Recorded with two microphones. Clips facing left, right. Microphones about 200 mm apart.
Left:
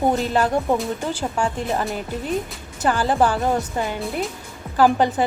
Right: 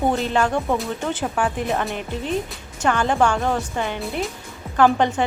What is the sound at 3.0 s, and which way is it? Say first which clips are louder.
Speech: left 1 dB; 35° left (ahead or behind).